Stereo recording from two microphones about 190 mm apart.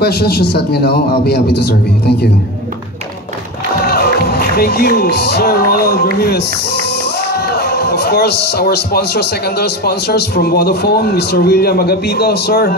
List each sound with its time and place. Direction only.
0.0 s a man's voice: 55° left (ahead or behind)
3.8 s speech: 55° left (ahead or behind)